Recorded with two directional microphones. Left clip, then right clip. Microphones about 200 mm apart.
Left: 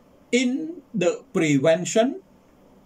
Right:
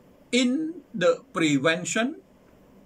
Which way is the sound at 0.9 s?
10° left (ahead or behind).